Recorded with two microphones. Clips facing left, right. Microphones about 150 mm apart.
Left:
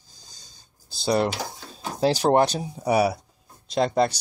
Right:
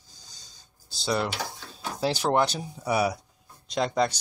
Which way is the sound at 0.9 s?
40° left (ahead or behind).